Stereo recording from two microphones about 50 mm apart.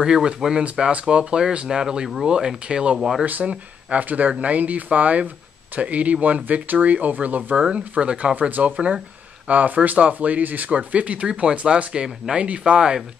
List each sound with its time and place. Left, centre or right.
0.0 s speech: centre
3.0 s speech: centre
3.3 s speech: right
8.4 s speech: right
8.7 s speech: right